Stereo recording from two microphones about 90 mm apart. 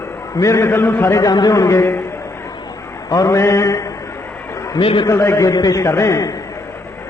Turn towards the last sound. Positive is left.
turn(degrees=40)  # may be behind; listen again after turning